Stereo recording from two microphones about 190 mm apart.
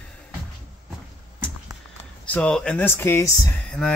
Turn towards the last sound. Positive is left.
turn(degrees=5)  # may be behind; listen again after turning